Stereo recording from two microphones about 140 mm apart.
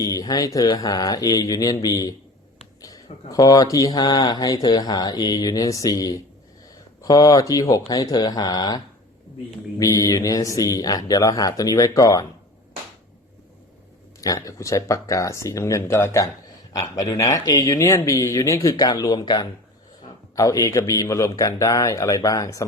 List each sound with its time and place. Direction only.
0.0 s speech: 25° left (ahead or behind)
14.2 s speech: 25° left (ahead or behind)